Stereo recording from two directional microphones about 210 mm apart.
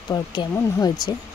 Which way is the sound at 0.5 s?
15° left (ahead or behind).